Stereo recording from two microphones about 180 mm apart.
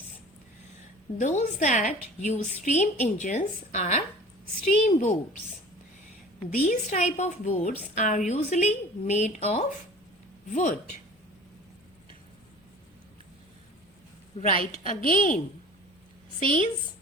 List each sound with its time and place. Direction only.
1.2 s a woman's voice: 45° left (ahead or behind)
6.5 s a woman's voice: 50° left (ahead or behind)
14.4 s a woman's voice: 50° left (ahead or behind)
16.4 s a woman's voice: 45° left (ahead or behind)